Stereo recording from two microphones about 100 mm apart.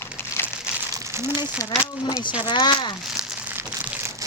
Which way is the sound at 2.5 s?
50° left (ahead or behind).